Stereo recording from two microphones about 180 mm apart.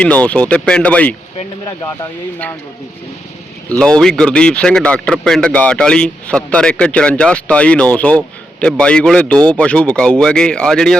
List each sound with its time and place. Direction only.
0.0 s speech: 10° left (ahead or behind)
3.7 s speech: 5° left (ahead or behind)